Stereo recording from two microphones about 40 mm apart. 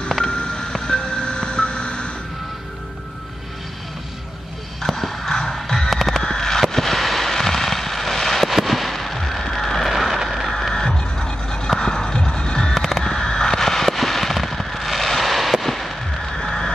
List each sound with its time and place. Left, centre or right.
0.2 s ice cream truck: left
4.8 s music: centre
6.2 s fireworks: centre
9.9 s vehicle: centre
10.7 s music: centre
12.7 s a sound: centre
13.0 s fireworks: centre
16.3 s music: centre